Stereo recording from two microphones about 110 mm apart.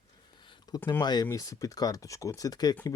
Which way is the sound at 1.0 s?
40° left (ahead or behind).